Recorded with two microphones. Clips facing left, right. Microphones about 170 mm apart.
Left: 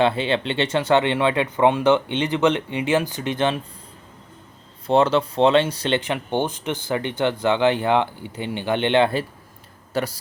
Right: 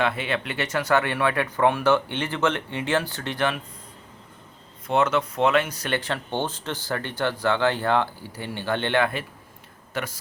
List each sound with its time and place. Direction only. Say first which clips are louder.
0.0 s speech: left 6 dB; 30° left (ahead or behind)
4.9 s a man's voice: left 4 dB; 30° left (ahead or behind)